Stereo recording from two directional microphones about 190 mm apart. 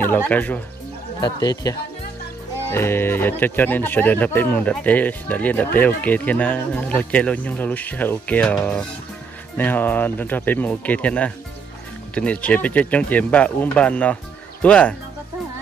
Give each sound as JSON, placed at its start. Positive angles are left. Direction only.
{"t": 0.0, "sound": "speech", "side_deg": 10}
{"t": 1.2, "sound": "speech", "side_deg": 20}